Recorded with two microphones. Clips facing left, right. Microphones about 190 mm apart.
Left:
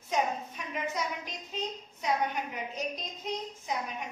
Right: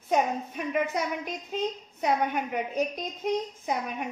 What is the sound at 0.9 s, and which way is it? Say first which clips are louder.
A child's voice: right 5 dB; 55° right (ahead or behind).